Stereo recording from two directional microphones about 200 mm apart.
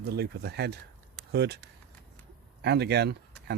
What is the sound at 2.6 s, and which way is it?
Speech, 55° right (ahead or behind).